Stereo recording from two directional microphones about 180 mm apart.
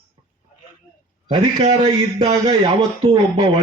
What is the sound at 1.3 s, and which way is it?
A man's voice, 25° right (ahead or behind).